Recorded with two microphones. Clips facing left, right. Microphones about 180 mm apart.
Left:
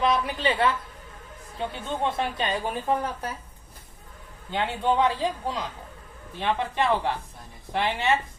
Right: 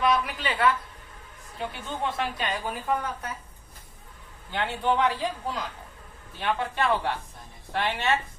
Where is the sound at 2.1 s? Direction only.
25° left (ahead or behind).